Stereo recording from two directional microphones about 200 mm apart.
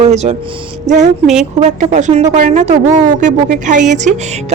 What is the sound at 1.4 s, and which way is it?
A woman's voice, 35° right (ahead or behind).